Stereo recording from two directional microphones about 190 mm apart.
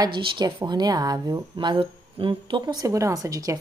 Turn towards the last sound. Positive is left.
turn(degrees=-20)  # may be behind; listen again after turning